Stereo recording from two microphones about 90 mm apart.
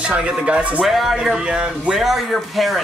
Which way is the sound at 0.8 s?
5° right (ahead or behind).